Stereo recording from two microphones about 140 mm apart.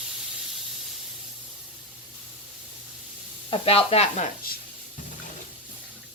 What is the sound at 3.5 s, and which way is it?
Speech, 45° left (ahead or behind).